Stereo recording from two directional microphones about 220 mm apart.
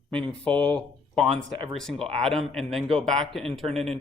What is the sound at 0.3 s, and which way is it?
Speech, 5° left (ahead or behind).